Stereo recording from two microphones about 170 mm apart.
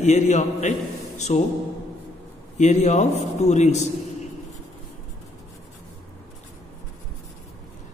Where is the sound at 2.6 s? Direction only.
45° left (ahead or behind).